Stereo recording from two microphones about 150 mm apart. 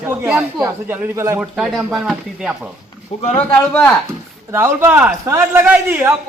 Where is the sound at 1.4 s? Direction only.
5° right (ahead or behind).